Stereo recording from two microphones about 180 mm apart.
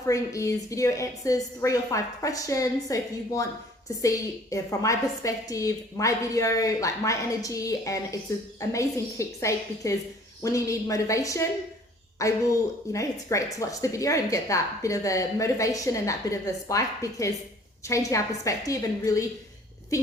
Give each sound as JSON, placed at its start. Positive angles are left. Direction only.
{"t": 0.1, "sound": "a woman's voice", "side_deg": 15}